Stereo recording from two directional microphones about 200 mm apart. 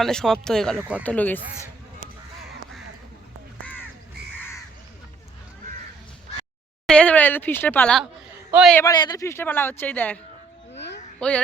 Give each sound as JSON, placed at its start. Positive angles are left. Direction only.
{"t": 0.0, "sound": "speech", "side_deg": 0}
{"t": 1.0, "sound": "speech", "side_deg": 5}
{"t": 6.8, "sound": "speech", "side_deg": 5}
{"t": 8.4, "sound": "a man's voice", "side_deg": -5}
{"t": 8.7, "sound": "speech", "side_deg": 15}
{"t": 10.8, "sound": "a sound", "side_deg": 60}
{"t": 11.2, "sound": "speech", "side_deg": 5}